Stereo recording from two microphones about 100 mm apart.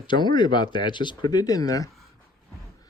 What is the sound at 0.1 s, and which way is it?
Speech, 50° left (ahead or behind).